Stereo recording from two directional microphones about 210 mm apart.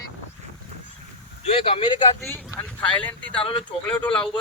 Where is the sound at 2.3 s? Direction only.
10° left (ahead or behind).